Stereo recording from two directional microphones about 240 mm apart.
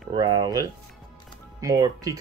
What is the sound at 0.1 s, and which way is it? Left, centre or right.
Speech, centre.